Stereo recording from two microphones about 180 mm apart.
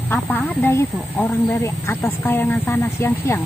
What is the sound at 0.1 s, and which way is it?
Speech, 10° left (ahead or behind).